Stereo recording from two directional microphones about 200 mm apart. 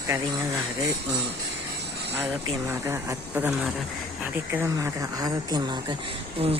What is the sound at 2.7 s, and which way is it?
A man's voice, 15° right (ahead or behind).